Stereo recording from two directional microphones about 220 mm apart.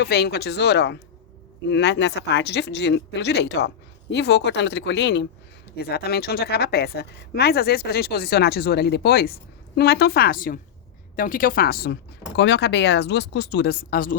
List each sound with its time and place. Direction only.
0.0 s a woman's voice: 45° left (ahead or behind)